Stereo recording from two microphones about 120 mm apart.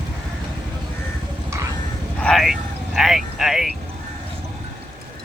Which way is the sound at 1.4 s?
25° right (ahead or behind).